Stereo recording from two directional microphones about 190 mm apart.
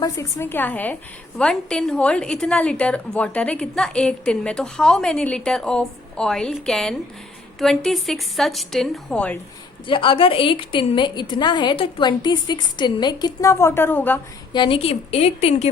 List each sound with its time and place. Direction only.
0.0 s a woman's voice: 15° left (ahead or behind)
9.8 s a woman's voice: 25° left (ahead or behind); by 14.2 s 10° left (ahead or behind)
14.5 s a woman's voice: 25° left (ahead or behind)